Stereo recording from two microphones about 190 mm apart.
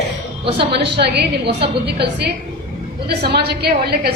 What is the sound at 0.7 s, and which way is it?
A woman's voice, 60° right (ahead or behind).